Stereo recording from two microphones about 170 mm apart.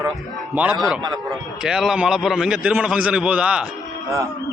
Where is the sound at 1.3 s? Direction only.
Centre (ahead or behind).